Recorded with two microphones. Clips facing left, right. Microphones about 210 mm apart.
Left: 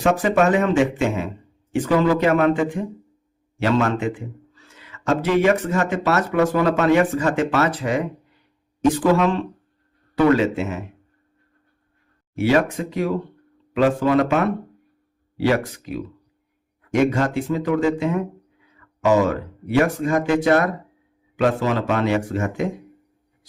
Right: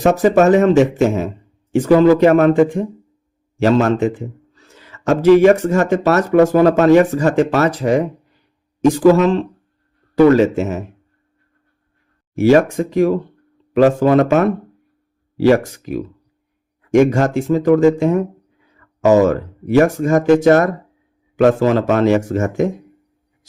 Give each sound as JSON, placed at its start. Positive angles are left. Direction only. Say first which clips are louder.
{"t": 0.0, "sound": "speech", "louder": "right 6 dB", "side_deg": -40}
{"t": 12.4, "sound": "speech", "louder": "right 7 dB", "side_deg": -45}